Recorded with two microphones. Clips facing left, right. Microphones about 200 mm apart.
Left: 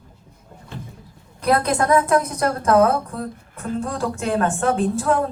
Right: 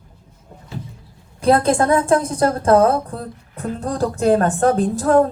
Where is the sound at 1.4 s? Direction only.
30° right (ahead or behind).